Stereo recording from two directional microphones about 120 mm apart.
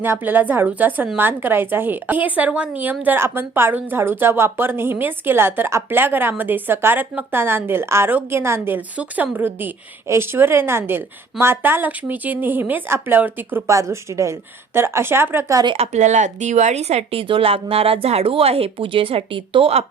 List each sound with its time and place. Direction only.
0.0 s a woman's voice: 15° right (ahead or behind)
13.7 s a woman's voice: 25° right (ahead or behind)
15.6 s speech: 45° right (ahead or behind)
15.9 s speech: 80° right; by 19.8 s 50° right (ahead or behind)